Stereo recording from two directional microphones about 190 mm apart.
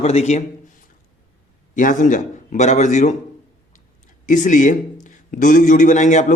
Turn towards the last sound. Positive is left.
turn(degrees=40)  # may be behind; listen again after turning